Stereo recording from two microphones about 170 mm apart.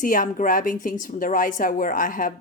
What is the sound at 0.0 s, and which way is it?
Speech, 50° left (ahead or behind).